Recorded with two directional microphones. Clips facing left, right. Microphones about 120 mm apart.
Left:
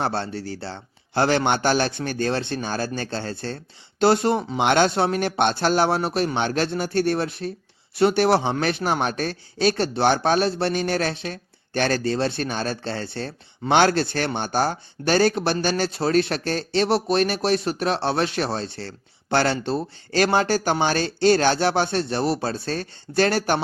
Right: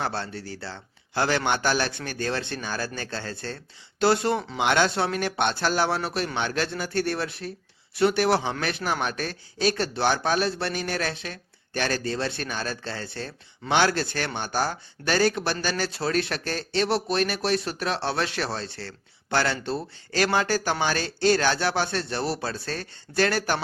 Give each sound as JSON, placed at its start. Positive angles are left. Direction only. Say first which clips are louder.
{"t": 0.0, "sound": "speech", "louder": "left 5 dB", "side_deg": 25}
{"t": 4.4, "sound": "speech", "louder": "left 4 dB", "side_deg": 45}
{"t": 4.9, "sound": "speech", "louder": "left 4 dB", "side_deg": 25}